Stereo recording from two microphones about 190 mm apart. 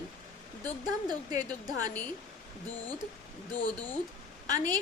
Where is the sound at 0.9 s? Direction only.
20° right (ahead or behind).